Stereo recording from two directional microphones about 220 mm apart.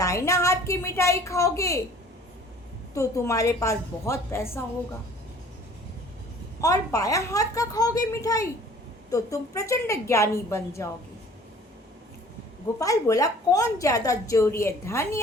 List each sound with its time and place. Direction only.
0.0 s a woman's voice: 15° left (ahead or behind)
2.9 s a woman's voice: 15° left (ahead or behind)
6.6 s a woman's voice: 15° left (ahead or behind)
12.8 s a woman's voice: 15° left (ahead or behind)